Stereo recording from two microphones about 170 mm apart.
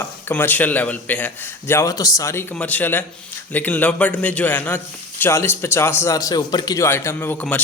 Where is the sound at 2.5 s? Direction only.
10° left (ahead or behind).